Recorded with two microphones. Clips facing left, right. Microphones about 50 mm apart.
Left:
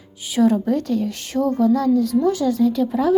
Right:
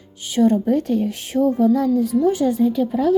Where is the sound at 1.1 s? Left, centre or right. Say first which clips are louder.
Right 2 dB; left.